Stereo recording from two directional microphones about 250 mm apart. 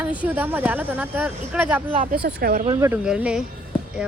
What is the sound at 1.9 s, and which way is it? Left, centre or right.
Speech, right.